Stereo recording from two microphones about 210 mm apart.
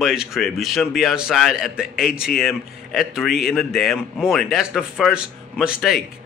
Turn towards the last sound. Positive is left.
turn(degrees=-5)  # may be behind; listen again after turning